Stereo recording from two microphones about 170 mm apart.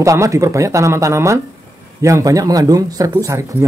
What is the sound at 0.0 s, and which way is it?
A man's voice, 15° right (ahead or behind).